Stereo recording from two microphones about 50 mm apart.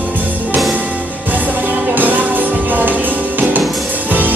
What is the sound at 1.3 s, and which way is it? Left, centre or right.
Music, right.